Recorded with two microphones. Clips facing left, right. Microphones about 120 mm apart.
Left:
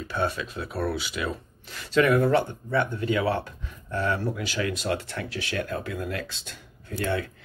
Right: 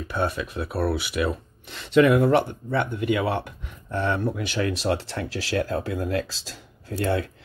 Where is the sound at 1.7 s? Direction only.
20° right (ahead or behind).